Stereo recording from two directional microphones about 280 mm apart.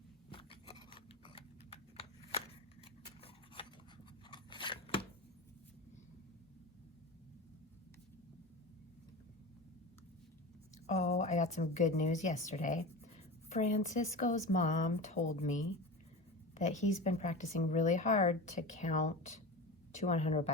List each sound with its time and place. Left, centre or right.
0.3 s a sound: centre
4.3 s scissors: centre
10.8 s a woman's voice: left